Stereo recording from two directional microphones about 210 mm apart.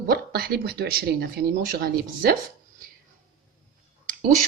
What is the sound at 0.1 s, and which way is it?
A woman's voice, 45° right (ahead or behind).